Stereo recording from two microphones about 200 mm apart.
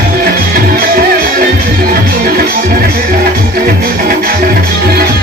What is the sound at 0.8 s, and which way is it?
Music, 50° right (ahead or behind).